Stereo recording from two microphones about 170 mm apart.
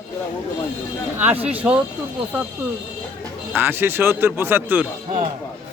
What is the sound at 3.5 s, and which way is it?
Speech, 10° right (ahead or behind).